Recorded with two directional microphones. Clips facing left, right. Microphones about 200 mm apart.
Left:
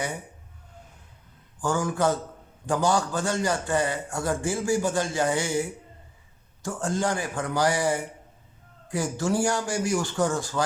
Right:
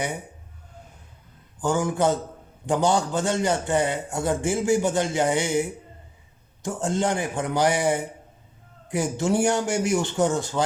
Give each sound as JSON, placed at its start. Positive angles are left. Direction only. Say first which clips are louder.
{"t": 1.6, "sound": "a man's voice", "louder": "right 2 dB", "side_deg": -20}